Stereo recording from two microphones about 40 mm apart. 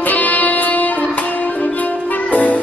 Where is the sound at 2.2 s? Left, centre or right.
Left.